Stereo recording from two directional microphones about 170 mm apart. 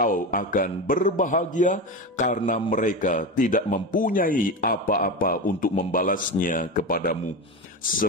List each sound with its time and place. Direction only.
0.0 s a man's voice: 55° left (ahead or behind)